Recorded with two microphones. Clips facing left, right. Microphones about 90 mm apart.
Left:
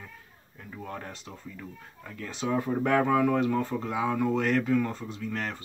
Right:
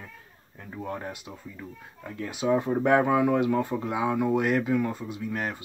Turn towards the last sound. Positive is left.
turn(degrees=-15)  # may be behind; listen again after turning